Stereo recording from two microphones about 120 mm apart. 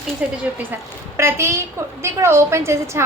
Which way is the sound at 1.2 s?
20° right (ahead or behind).